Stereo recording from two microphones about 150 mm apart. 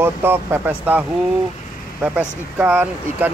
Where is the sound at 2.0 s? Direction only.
5° right (ahead or behind).